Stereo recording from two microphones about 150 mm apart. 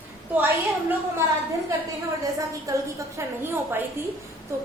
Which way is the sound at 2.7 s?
25° right (ahead or behind).